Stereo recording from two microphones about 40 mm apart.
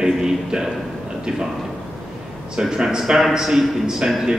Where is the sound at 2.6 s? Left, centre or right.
Centre.